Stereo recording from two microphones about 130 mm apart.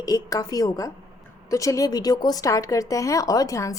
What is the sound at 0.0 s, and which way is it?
Speech, 25° left (ahead or behind).